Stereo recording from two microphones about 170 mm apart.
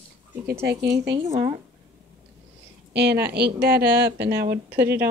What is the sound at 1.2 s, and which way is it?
Speech, 30° right (ahead or behind).